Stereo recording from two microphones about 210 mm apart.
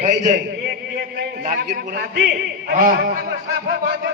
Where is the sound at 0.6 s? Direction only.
55° right (ahead or behind).